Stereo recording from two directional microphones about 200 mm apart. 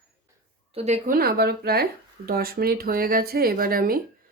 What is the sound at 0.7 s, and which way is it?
Speech, 30° right (ahead or behind).